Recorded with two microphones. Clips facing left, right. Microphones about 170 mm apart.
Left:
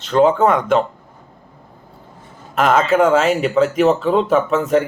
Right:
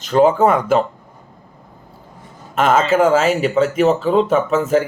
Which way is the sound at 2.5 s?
Centre (ahead or behind).